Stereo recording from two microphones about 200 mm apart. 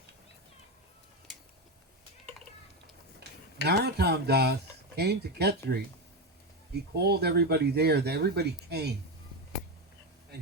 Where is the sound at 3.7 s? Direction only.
55° right (ahead or behind).